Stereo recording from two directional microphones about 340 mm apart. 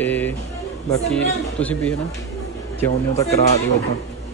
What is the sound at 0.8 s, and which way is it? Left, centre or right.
A woman's voice, centre.